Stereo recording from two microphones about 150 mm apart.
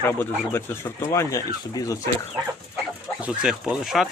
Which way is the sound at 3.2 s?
5° right (ahead or behind).